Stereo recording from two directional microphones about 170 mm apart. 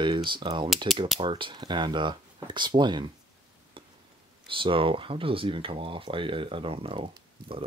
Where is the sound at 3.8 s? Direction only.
30° right (ahead or behind).